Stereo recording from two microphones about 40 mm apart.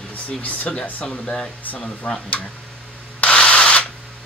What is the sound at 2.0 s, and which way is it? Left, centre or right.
Speech, left.